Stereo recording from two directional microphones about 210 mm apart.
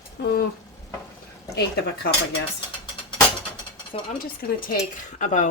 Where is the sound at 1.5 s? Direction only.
50° left (ahead or behind).